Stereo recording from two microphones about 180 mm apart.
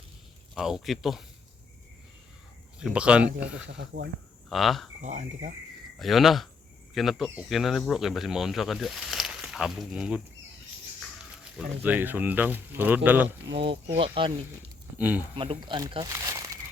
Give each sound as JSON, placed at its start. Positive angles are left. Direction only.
{"t": 0.5, "sound": "speech", "side_deg": 0}
{"t": 2.7, "sound": "speech", "side_deg": -5}
{"t": 3.8, "sound": "speech", "side_deg": -65}
{"t": 4.4, "sound": "speech", "side_deg": 0}
{"t": 5.0, "sound": "speech", "side_deg": -40}
{"t": 6.0, "sound": "speech", "side_deg": 0}
{"t": 11.5, "sound": "speech", "side_deg": -10}
{"t": 13.7, "sound": "speech", "side_deg": -30}
{"t": 14.9, "sound": "speech", "side_deg": -10}
{"t": 15.4, "sound": "speech", "side_deg": -25}
{"t": 16.1, "sound": "crumpling", "side_deg": -15}